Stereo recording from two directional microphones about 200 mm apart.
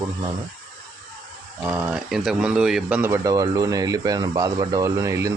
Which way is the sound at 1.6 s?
10° right (ahead or behind).